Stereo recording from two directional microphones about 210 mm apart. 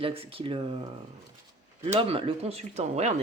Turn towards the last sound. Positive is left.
turn(degrees=-35)  # may be behind; listen again after turning